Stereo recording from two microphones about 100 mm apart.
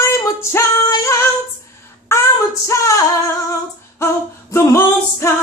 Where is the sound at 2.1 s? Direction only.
25° left (ahead or behind).